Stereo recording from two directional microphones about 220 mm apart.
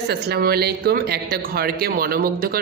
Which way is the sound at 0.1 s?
45° right (ahead or behind).